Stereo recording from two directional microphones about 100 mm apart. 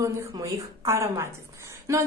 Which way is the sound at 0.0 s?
35° right (ahead or behind).